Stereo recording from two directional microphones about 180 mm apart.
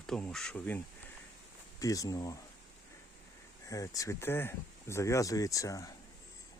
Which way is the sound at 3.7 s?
20° left (ahead or behind).